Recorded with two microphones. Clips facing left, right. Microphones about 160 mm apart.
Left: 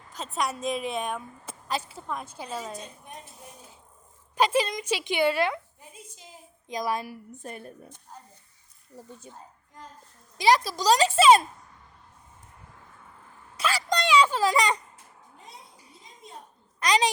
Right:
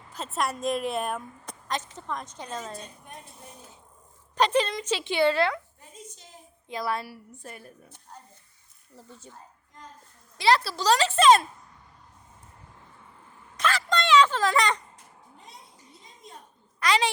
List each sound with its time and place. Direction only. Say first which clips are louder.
0.1 s speech: even; centre (ahead or behind)
4.4 s a woman's voice: even; 10° left (ahead or behind); by 7.9 s 25° left (ahead or behind)
9.0 s a woman's voice: left 3 dB; 15° left (ahead or behind)
10.3 s a woman's voice: left 1 dB; 15° left (ahead or behind)
13.6 s a sound: even; 10° left (ahead or behind)
16.8 s a child's voice: left 1 dB; 15° left (ahead or behind)